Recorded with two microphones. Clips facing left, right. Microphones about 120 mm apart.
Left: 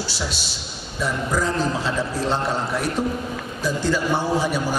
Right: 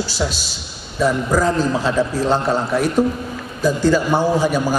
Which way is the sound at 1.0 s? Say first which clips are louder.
Right 6 dB; 45° right (ahead or behind).